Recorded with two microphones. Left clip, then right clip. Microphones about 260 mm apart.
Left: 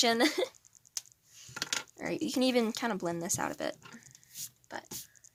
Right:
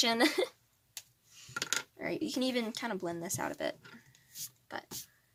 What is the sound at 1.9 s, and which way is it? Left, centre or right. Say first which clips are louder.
Speech: left 3 dB; centre.